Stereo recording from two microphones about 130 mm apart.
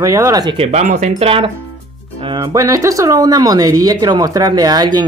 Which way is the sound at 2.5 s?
25° right (ahead or behind).